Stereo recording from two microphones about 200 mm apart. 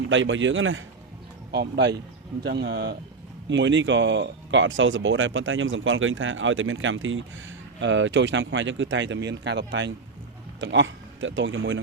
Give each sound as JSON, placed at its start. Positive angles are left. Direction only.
{"t": 0.1, "sound": "speech", "side_deg": -70}
{"t": 1.5, "sound": "speech", "side_deg": -55}